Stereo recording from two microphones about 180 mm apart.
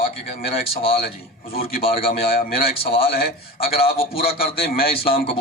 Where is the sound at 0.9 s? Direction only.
55° left (ahead or behind).